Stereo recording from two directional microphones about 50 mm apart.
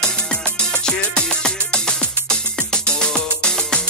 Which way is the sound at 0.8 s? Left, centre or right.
Centre.